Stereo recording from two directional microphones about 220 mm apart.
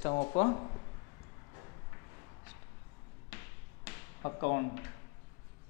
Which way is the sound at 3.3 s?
15° left (ahead or behind).